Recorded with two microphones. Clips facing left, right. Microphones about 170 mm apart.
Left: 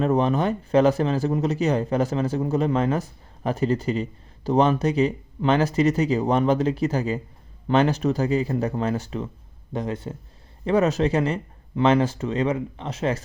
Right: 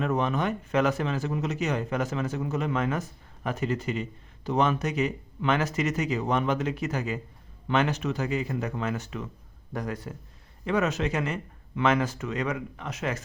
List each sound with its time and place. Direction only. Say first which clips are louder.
0.0 s a man's voice: left 6 dB; 35° left (ahead or behind)